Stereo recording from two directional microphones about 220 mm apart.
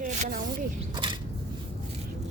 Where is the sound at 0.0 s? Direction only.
40° right (ahead or behind).